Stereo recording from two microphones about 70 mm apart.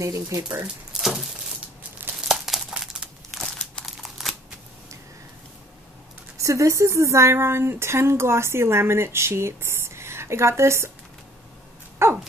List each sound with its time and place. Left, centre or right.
0.0 s speech: right
0.9 s a sound: centre
1.8 s crumpling: right
2.2 s crumpling: centre
3.3 s crumpling: centre
3.8 s a sound: centre
6.3 s speech: right
12.0 s dog: right